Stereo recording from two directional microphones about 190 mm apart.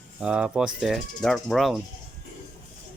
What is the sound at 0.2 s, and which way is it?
Speech, 5° right (ahead or behind).